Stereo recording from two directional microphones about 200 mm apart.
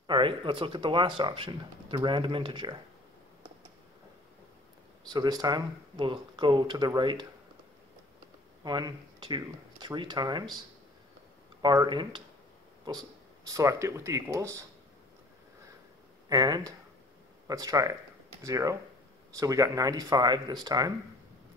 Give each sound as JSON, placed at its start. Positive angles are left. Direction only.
{"t": 0.0, "sound": "speech", "side_deg": -25}
{"t": 5.1, "sound": "speech", "side_deg": -20}
{"t": 8.6, "sound": "speech", "side_deg": -20}
{"t": 11.6, "sound": "speech", "side_deg": -20}
{"t": 16.3, "sound": "speech", "side_deg": -20}